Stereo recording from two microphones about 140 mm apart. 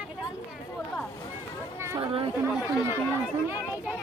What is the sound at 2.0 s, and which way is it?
Chatter, 40° right (ahead or behind).